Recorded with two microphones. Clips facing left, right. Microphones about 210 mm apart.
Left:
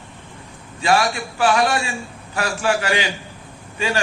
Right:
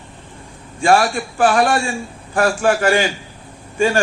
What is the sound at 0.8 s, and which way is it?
A man's voice, 50° right (ahead or behind).